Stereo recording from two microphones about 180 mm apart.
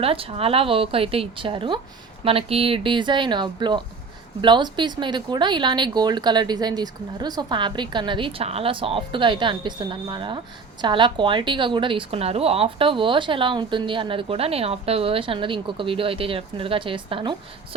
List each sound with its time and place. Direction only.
0.0 s a woman's voice: 30° right (ahead or behind)